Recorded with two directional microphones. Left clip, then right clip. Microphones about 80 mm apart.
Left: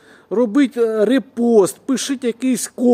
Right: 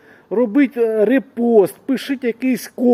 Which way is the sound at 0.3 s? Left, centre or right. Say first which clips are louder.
Even; left.